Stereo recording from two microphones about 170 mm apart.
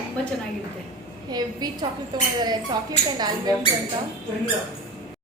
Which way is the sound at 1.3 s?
25° right (ahead or behind).